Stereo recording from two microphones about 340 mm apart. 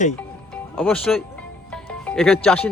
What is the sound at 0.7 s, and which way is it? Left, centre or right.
Speech, centre.